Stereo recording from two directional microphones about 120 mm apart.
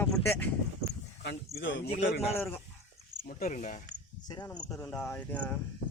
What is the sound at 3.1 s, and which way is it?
Cricket, 80° right.